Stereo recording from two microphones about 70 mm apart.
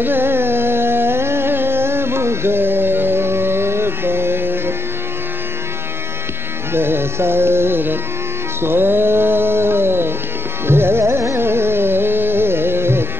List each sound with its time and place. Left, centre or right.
0.0 s carnatic music: right
6.7 s music: right
10.7 s carnatic music: right